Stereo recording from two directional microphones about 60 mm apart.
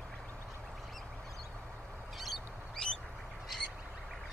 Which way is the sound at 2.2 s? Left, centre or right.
Centre.